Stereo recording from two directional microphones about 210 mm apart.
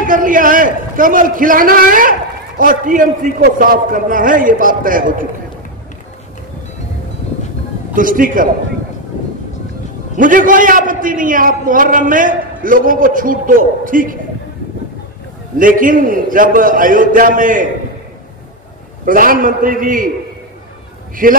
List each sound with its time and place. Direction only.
0.0 s a man's voice: 40° right (ahead or behind)
7.9 s a man's voice: 40° right (ahead or behind)
10.1 s a man's voice: 40° right (ahead or behind)
15.5 s a man's voice: 40° right (ahead or behind)
19.0 s a man's voice: 40° right (ahead or behind)
21.2 s a man's voice: 40° right (ahead or behind)